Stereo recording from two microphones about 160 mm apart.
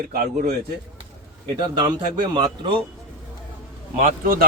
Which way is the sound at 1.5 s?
30° right (ahead or behind).